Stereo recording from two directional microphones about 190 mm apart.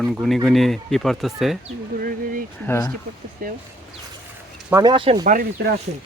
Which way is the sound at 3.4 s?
45° right (ahead or behind).